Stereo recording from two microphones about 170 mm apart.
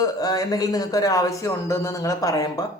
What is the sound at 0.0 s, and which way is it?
Speech, 20° left (ahead or behind).